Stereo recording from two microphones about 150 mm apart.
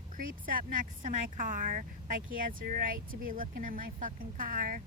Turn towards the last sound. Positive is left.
turn(degrees=-65)  # may be behind; listen again after turning